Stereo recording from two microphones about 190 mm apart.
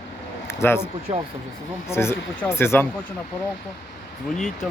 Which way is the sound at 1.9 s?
15° left (ahead or behind).